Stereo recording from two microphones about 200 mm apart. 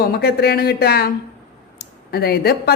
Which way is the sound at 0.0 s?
50° left (ahead or behind).